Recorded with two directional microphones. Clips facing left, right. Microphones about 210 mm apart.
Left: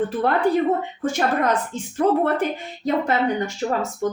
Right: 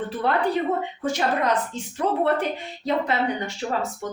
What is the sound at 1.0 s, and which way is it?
Speech, 50° left (ahead or behind).